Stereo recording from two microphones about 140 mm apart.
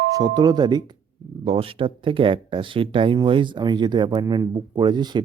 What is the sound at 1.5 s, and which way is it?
Speech, 40° right (ahead or behind).